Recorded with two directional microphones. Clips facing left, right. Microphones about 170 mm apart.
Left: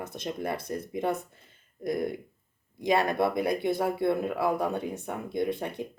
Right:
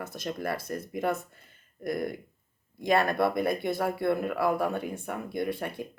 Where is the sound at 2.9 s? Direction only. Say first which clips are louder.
Even; 20° left (ahead or behind).